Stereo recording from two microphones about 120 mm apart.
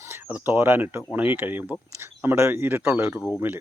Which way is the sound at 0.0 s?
15° right (ahead or behind).